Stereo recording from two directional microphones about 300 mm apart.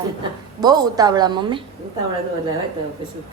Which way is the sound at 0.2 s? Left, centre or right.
Centre.